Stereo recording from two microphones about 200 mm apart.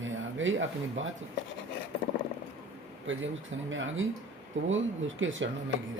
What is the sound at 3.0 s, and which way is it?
Speech, 70° right (ahead or behind).